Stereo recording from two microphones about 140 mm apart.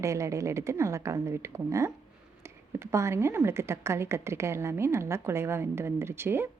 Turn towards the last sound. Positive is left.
turn(degrees=-15)  # may be behind; listen again after turning